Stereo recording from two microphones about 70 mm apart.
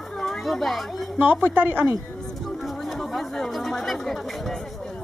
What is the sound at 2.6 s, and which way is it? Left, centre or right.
A woman's voice, centre.